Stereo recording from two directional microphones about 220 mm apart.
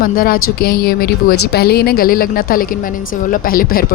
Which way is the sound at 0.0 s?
40° left (ahead or behind).